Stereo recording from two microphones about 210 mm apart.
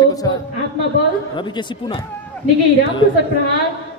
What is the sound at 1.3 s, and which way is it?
Speech, 20° left (ahead or behind).